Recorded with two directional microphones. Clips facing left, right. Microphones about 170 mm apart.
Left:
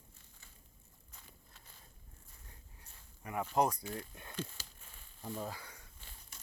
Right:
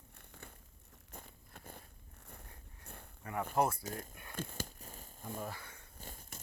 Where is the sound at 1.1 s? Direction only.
55° right (ahead or behind).